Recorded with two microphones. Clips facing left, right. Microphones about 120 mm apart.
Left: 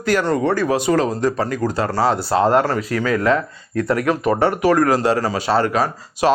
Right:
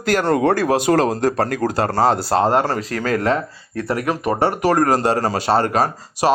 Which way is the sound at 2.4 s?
25° right (ahead or behind).